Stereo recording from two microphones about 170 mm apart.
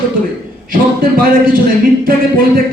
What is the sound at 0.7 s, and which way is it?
A man's voice, 55° right (ahead or behind).